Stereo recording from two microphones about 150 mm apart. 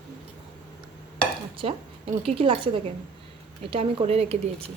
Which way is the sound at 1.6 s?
40° right (ahead or behind).